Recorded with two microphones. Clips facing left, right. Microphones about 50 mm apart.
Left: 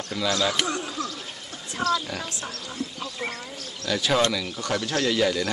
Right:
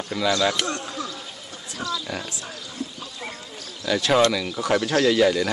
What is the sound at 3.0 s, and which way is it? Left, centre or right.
Speech, centre.